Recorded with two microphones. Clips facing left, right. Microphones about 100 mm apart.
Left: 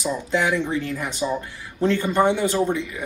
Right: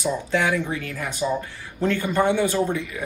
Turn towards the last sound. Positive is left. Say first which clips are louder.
# left 1 dB
turn(degrees=20)  # may be behind; listen again after turning